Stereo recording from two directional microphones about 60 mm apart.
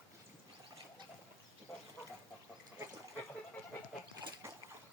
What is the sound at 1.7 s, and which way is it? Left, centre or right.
Bird, left.